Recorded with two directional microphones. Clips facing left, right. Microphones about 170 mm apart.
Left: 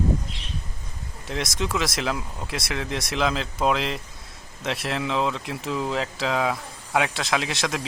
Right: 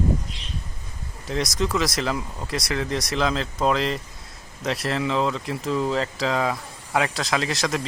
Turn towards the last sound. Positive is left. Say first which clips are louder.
# right 1 dB
turn(degrees=0)  # may be behind; listen again after turning